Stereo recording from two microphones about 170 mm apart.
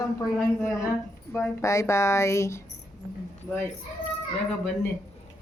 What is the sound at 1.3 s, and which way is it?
A woman's voice, 15° left (ahead or behind).